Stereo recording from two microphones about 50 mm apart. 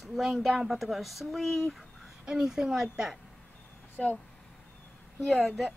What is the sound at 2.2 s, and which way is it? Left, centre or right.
Speech, centre.